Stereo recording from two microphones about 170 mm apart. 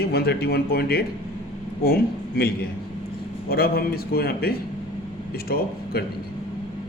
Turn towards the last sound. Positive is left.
turn(degrees=65)  # may be behind; listen again after turning